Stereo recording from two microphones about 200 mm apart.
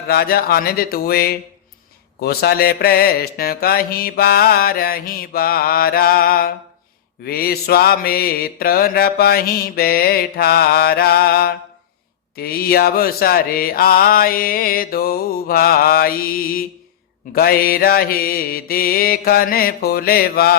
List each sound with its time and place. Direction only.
0.1 s mantra: 50° left (ahead or behind)